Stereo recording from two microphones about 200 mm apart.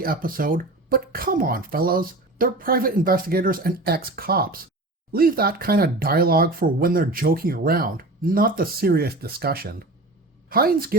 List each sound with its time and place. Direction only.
0.0 s speech: 45° right (ahead or behind)